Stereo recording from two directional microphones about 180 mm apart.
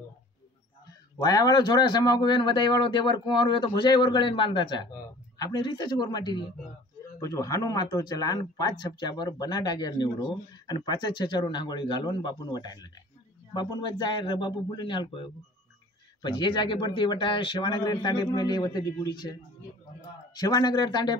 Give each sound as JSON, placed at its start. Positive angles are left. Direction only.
{"t": 1.2, "sound": "a man's voice", "side_deg": 20}
{"t": 20.3, "sound": "a man's voice", "side_deg": 20}